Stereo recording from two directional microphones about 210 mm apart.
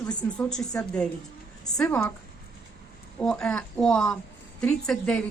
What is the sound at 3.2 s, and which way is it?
A woman's voice, 5° left (ahead or behind).